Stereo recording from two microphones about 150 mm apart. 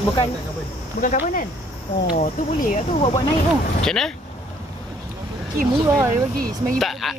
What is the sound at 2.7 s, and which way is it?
Speech, 40° left (ahead or behind).